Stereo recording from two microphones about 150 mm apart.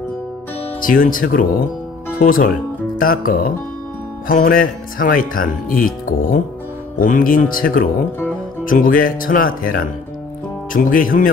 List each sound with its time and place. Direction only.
0.7 s speech: 65° left (ahead or behind)